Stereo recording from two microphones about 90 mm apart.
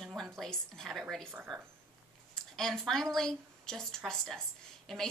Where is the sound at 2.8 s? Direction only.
5° left (ahead or behind).